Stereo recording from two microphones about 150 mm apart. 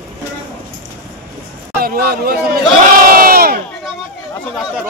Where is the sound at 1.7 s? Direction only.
85° right.